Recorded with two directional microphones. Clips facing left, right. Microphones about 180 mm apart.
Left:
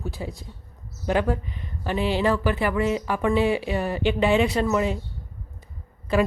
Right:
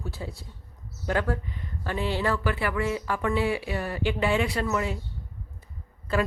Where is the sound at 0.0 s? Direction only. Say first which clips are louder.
Left 4 dB; 15° left (ahead or behind).